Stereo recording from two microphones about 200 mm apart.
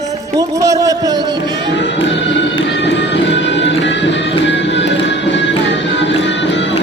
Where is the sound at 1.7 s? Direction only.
65° left (ahead or behind).